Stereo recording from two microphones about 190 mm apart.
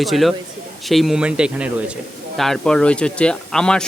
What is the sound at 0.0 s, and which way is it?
Speech, centre (ahead or behind).